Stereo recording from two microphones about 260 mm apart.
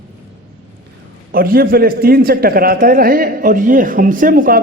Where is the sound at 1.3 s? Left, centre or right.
Right.